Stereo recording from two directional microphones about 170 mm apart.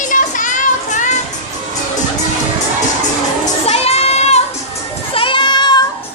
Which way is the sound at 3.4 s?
40° left (ahead or behind).